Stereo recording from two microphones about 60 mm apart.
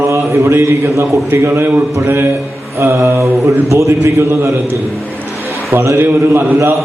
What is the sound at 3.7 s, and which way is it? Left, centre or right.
Speech, right.